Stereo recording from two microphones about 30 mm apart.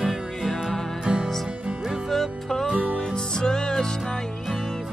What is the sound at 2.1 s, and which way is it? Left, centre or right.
Music, centre.